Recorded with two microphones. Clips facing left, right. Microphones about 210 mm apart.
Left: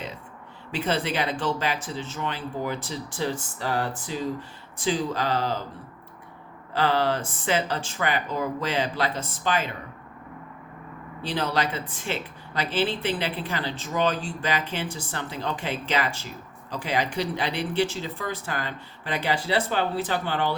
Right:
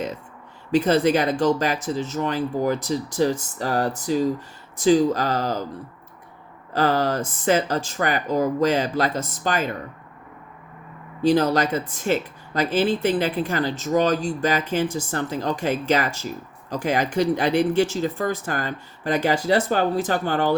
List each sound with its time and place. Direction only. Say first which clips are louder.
0.7 s speech: right 9 dB; 40° right (ahead or behind)
6.7 s speech: right 3 dB; 45° right (ahead or behind)
11.2 s speech: right 8 dB; 45° right (ahead or behind)